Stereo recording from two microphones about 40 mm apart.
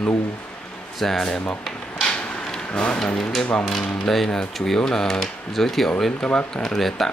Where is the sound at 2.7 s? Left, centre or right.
Left.